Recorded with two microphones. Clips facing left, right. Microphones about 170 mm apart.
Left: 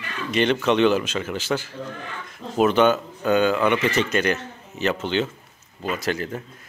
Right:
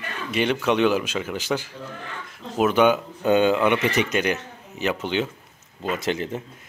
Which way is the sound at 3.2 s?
20° right (ahead or behind).